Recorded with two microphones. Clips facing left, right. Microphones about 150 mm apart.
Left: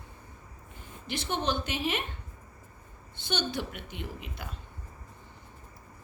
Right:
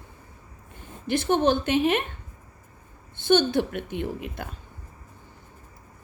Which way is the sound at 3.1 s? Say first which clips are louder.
Right 12 dB; 50° right (ahead or behind).